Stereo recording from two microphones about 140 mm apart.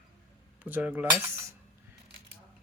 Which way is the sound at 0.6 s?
10° right (ahead or behind).